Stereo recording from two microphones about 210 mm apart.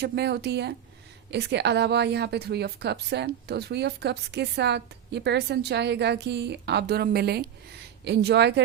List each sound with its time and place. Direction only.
0.0 s a woman's voice: 50° right (ahead or behind)